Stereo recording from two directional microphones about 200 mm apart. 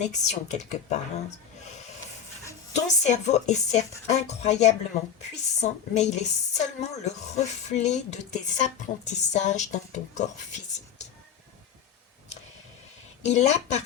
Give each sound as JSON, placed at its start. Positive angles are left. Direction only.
{"t": 0.0, "sound": "a woman's voice", "side_deg": 35}
{"t": 2.7, "sound": "a woman's voice", "side_deg": 35}
{"t": 13.2, "sound": "a woman's voice", "side_deg": 35}